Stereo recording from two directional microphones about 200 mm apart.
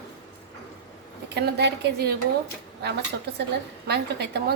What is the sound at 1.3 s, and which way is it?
Speech, 55° right (ahead or behind).